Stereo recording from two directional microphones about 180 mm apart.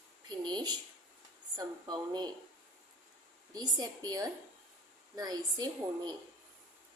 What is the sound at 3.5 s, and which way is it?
A woman's voice, 20° right (ahead or behind).